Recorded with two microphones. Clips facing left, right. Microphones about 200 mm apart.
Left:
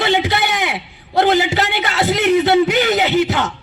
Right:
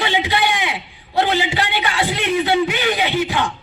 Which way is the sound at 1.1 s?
45° left (ahead or behind).